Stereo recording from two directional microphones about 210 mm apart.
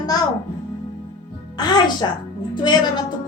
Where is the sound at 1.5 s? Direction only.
20° left (ahead or behind).